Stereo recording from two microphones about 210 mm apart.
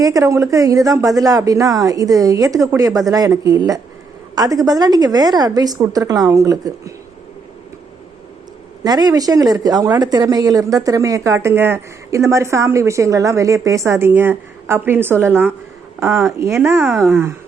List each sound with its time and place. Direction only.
0.0 s speech: 15° right (ahead or behind)
8.8 s speech: 20° right (ahead or behind)
16.8 s speech: centre (ahead or behind)